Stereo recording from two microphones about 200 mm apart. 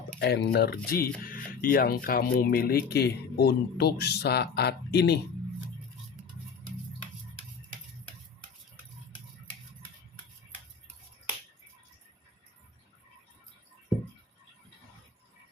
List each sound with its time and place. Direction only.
0.2 s speech: 55° left (ahead or behind)